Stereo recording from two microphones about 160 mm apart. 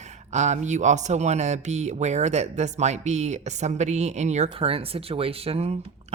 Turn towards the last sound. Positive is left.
turn(degrees=-40)  # may be behind; listen again after turning